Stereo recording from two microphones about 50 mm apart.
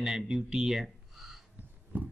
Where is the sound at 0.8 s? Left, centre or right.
Centre.